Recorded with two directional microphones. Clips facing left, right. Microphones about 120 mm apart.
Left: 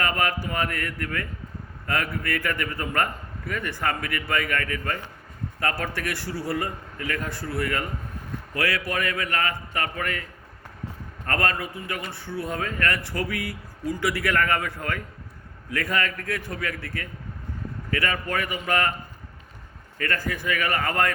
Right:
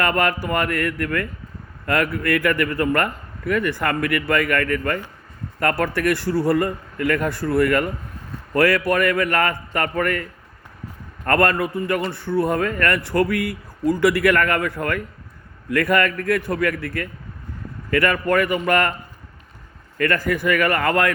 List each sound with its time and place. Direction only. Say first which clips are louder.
0.0 s a man's voice: right 5 dB; 65° right (ahead or behind)
11.3 s a man's voice: right 8 dB; 60° right (ahead or behind)
20.0 s a man's voice: right 8 dB; 65° right (ahead or behind)